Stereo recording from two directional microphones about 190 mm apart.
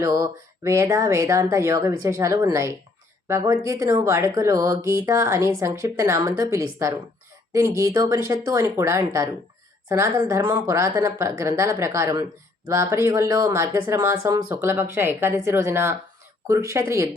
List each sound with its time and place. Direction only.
0.0 s speech: 15° right (ahead or behind)